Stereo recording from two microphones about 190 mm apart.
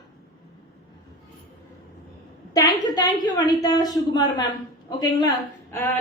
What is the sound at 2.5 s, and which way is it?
A woman's voice, 20° left (ahead or behind).